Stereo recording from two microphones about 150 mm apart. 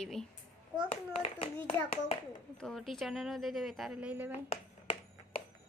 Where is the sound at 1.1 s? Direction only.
40° left (ahead or behind).